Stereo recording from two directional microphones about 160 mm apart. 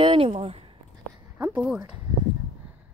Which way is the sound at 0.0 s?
35° right (ahead or behind).